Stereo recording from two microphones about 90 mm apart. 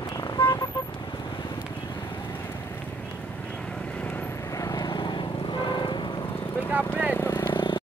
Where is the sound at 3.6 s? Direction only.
15° left (ahead or behind).